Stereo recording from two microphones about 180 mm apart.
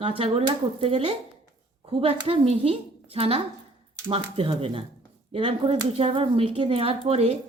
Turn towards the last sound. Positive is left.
turn(degrees=-35)  # may be behind; listen again after turning